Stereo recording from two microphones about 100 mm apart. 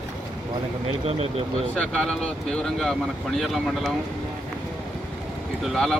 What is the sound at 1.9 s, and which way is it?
Speech, 5° left (ahead or behind).